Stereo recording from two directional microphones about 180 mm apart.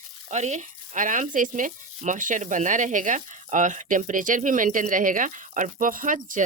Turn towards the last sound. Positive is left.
turn(degrees=-45)  # may be behind; listen again after turning